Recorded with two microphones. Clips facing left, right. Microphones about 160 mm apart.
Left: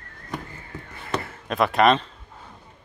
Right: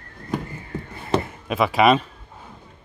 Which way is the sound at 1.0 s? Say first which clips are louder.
Right 6 dB; 25° right (ahead or behind).